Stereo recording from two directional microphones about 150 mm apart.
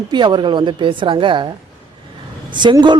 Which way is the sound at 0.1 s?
30° right (ahead or behind).